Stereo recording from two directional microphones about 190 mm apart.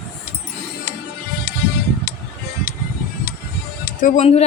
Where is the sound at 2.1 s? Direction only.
55° left (ahead or behind).